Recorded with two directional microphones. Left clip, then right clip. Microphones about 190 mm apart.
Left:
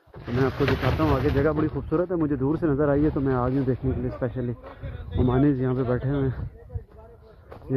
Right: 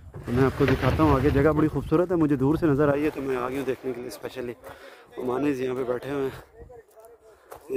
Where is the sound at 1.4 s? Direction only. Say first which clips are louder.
Right 2 dB; 40° right (ahead or behind); by 6.3 s 25° right (ahead or behind).